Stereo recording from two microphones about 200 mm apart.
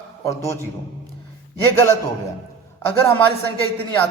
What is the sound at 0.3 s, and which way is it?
Speech, 15° left (ahead or behind).